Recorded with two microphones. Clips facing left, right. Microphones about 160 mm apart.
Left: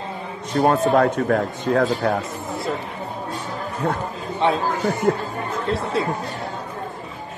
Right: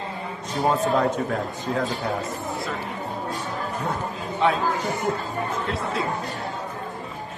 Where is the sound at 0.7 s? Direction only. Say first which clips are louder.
Left 4 dB; 65° left (ahead or behind).